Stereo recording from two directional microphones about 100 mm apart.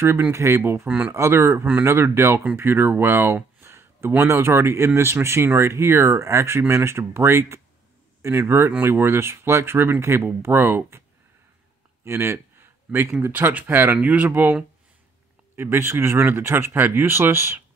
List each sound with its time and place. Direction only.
0.0 s speech: 25° right (ahead or behind)
12.0 s a sound: 25° right (ahead or behind)
13.2 s speech: 15° right (ahead or behind)